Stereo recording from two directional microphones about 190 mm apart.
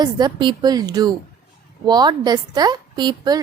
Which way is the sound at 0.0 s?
20° right (ahead or behind).